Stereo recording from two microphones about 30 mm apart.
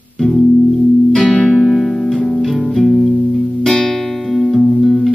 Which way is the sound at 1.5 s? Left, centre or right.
Centre.